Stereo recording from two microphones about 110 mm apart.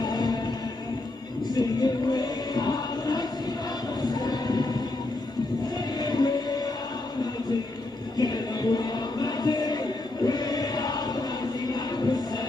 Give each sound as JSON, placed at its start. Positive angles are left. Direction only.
{"t": 0.0, "sound": "music", "side_deg": 40}
{"t": 1.5, "sound": "chant", "side_deg": 40}
{"t": 4.0, "sound": "a sound", "side_deg": 40}
{"t": 5.9, "sound": "music", "side_deg": 40}
{"t": 8.2, "sound": "music", "side_deg": 40}